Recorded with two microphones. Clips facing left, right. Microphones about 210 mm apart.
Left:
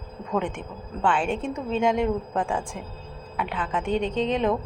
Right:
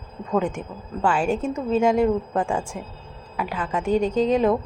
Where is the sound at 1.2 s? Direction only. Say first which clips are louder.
Right 4 dB; 40° right (ahead or behind).